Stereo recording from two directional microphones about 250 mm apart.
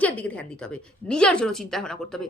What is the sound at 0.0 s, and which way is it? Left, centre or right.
A woman's voice, centre.